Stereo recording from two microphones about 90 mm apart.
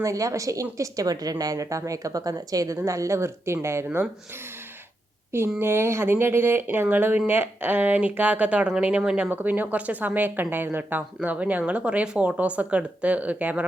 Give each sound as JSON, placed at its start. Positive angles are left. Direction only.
{"t": 0.0, "sound": "a woman's voice", "side_deg": -35}
{"t": 5.5, "sound": "speech", "side_deg": -30}
{"t": 9.3, "sound": "speech", "side_deg": -20}